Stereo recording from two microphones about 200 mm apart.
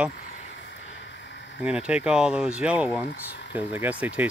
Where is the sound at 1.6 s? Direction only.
5° right (ahead or behind).